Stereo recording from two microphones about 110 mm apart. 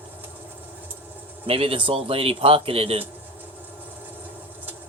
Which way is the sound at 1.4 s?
60° right (ahead or behind).